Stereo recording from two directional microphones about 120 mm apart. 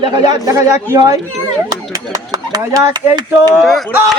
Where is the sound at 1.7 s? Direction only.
30° right (ahead or behind).